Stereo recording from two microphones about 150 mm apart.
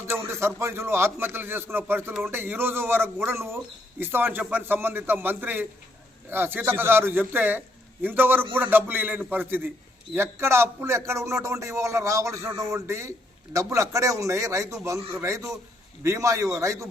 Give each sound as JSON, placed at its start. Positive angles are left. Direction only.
{"t": 0.1, "sound": "a man's voice", "side_deg": -15}